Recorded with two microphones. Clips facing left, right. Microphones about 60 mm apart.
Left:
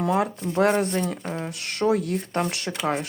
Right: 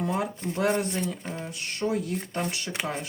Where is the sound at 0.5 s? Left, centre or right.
Left.